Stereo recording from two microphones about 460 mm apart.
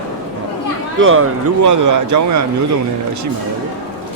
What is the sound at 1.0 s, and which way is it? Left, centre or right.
Speech, right.